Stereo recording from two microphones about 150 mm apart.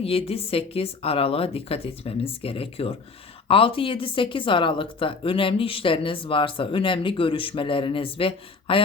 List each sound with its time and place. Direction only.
0.0 s speech: 40° left (ahead or behind)